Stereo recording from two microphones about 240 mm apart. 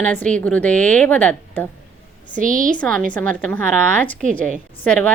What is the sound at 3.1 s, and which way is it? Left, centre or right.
A woman's voice, centre.